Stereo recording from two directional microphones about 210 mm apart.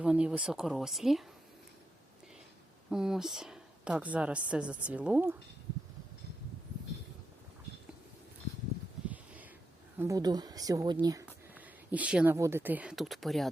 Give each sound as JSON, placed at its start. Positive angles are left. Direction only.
{"t": 0.0, "sound": "a woman's voice", "side_deg": -5}
{"t": 2.9, "sound": "a woman's voice", "side_deg": -5}
{"t": 9.0, "sound": "a sound", "side_deg": -5}
{"t": 10.0, "sound": "speech", "side_deg": -15}